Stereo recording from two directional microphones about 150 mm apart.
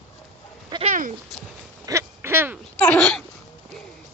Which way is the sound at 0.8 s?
60° right (ahead or behind).